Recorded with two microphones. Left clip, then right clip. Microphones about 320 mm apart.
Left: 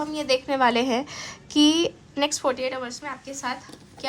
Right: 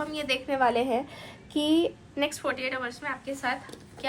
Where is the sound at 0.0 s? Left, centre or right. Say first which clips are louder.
Left 5 dB; centre; by 1.8 s left.